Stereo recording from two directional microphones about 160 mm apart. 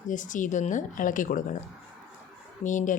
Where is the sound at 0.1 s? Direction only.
55° left (ahead or behind).